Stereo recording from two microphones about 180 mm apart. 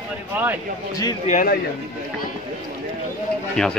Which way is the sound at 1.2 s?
45° left (ahead or behind).